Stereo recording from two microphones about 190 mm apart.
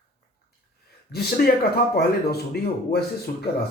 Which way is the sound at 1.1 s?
55° left (ahead or behind).